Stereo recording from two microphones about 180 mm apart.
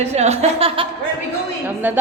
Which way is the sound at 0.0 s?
35° right (ahead or behind).